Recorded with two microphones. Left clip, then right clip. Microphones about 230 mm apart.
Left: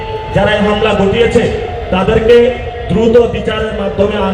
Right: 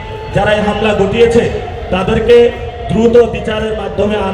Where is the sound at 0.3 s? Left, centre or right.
Right.